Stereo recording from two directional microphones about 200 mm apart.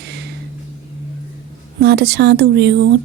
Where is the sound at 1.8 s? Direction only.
50° right (ahead or behind).